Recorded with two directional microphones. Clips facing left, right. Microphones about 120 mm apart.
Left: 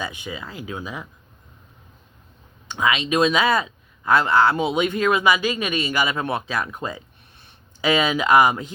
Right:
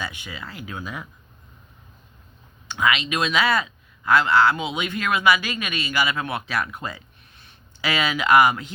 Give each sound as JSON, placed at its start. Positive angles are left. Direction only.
{"t": 0.0, "sound": "speech", "side_deg": 20}
{"t": 2.7, "sound": "speech", "side_deg": 25}